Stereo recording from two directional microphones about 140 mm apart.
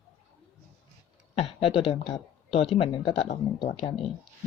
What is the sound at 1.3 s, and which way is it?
Speech, 40° left (ahead or behind).